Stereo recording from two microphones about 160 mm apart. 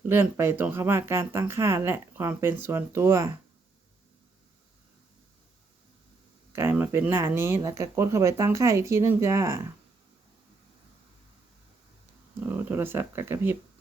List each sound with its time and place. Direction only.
0.1 s speech: 15° right (ahead or behind)
6.5 s speech: 15° right (ahead or behind)
12.5 s speech: 10° right (ahead or behind)